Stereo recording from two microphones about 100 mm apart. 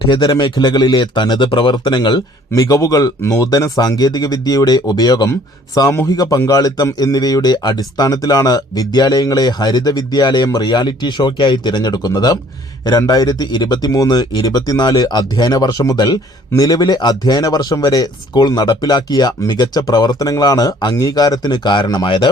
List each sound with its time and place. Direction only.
0.1 s speech: 45° left (ahead or behind)
2.5 s speech: 35° left (ahead or behind); by 22.3 s 50° left (ahead or behind)